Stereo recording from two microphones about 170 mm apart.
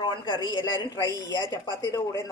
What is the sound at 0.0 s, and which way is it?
A woman's voice, 30° left (ahead or behind).